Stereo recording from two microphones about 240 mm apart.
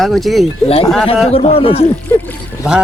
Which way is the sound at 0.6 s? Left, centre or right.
Left.